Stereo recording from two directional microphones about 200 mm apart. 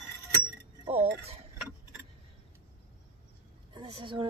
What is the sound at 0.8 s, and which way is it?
Cutlery, 30° right (ahead or behind).